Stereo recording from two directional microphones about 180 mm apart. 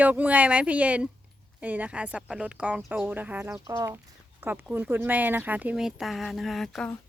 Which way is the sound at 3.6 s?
20° right (ahead or behind).